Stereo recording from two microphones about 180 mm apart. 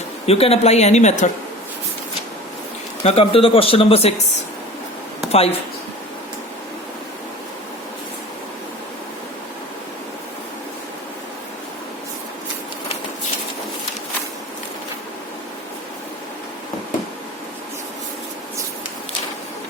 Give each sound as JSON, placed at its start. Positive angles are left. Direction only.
{"t": 0.3, "sound": "speech", "side_deg": 35}
{"t": 3.0, "sound": "speech", "side_deg": 35}
{"t": 5.3, "sound": "speech", "side_deg": 35}